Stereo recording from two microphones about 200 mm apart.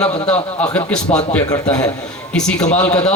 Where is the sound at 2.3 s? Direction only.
5° left (ahead or behind).